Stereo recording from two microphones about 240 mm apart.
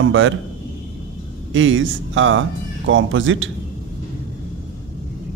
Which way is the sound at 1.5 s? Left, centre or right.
Right.